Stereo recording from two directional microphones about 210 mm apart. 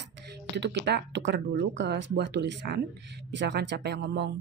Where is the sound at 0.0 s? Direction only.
55° right (ahead or behind).